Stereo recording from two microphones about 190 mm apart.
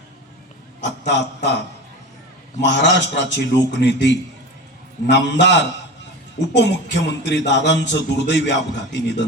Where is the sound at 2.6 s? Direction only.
70° left (ahead or behind).